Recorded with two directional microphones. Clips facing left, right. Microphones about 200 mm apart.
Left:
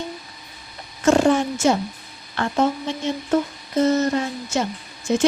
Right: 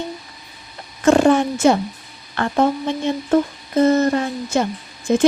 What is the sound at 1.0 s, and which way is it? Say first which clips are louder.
A woman's voice: right 3 dB; 60° right (ahead or behind).